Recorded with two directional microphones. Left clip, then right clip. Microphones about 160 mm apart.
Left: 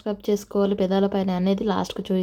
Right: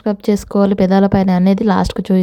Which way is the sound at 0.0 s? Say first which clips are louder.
Right 7 dB; 45° right (ahead or behind).